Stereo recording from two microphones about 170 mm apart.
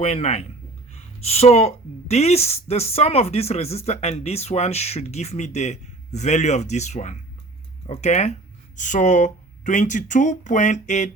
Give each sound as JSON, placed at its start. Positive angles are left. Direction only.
{"t": 0.0, "sound": "speech", "side_deg": 40}